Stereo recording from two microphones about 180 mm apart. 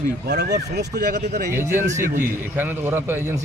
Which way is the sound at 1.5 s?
15° right (ahead or behind).